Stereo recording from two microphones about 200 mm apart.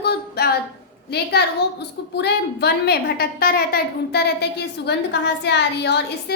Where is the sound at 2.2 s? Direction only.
55° left (ahead or behind).